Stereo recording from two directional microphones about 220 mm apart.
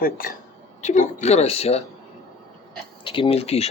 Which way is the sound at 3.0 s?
25° left (ahead or behind).